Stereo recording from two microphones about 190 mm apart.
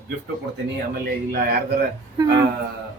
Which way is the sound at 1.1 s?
55° right (ahead or behind).